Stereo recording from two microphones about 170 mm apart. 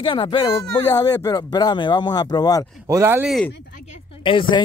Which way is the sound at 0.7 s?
20° left (ahead or behind).